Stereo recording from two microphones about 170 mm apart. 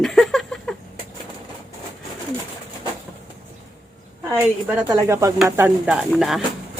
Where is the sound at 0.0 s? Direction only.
Centre (ahead or behind).